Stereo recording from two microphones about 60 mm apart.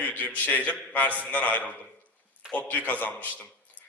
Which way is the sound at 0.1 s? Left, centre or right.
Left.